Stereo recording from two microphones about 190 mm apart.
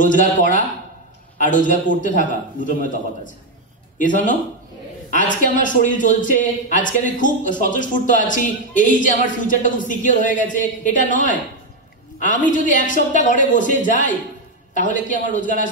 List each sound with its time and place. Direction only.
0.0 s a man's voice: 45° left (ahead or behind)
4.0 s a man's voice: 45° left (ahead or behind)